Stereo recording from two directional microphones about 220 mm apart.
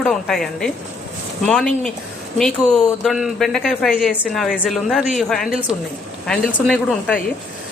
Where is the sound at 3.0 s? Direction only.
Centre (ahead or behind).